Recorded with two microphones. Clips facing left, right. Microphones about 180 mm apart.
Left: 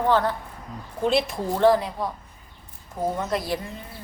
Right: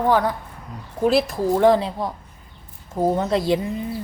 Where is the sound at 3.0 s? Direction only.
30° right (ahead or behind).